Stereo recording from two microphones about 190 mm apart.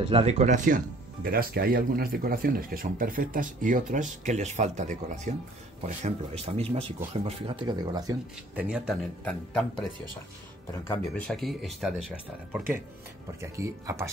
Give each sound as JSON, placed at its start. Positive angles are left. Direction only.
{"t": 0.1, "sound": "speech", "side_deg": -35}
{"t": 8.5, "sound": "speech", "side_deg": -5}
{"t": 12.5, "sound": "speech", "side_deg": -10}